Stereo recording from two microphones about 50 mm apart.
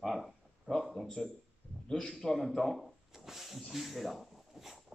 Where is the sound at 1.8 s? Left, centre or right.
Centre.